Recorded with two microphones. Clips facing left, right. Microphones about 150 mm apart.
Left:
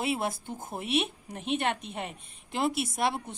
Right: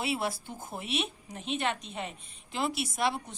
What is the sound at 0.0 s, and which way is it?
A woman's voice, 50° left (ahead or behind).